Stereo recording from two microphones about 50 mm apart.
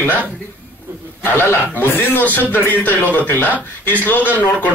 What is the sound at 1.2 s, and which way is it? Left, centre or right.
Speech, left.